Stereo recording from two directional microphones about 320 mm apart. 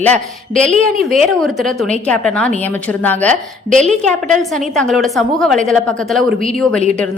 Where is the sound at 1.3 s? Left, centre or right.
Centre.